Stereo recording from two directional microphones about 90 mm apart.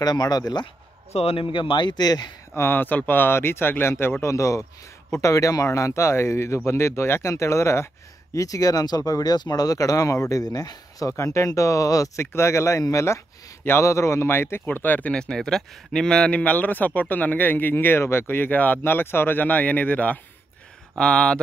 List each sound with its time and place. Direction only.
0.0 s speech: 50° left (ahead or behind)
1.2 s a man's voice: 80° left; by 2.3 s 50° left (ahead or behind)
2.5 s speech: 25° left (ahead or behind)
15.1 s speech: 10° left (ahead or behind)